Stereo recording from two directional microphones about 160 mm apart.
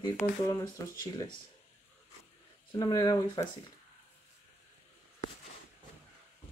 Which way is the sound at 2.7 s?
25° left (ahead or behind).